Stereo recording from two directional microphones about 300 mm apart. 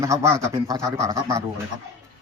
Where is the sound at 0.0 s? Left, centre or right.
Centre.